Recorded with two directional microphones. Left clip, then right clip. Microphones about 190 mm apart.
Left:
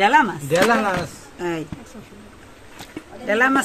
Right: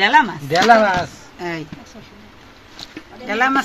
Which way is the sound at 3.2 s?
30° left (ahead or behind).